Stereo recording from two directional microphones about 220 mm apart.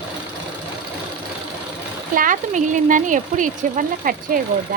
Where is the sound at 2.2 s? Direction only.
35° right (ahead or behind).